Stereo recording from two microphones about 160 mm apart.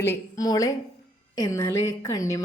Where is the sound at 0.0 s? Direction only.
20° left (ahead or behind).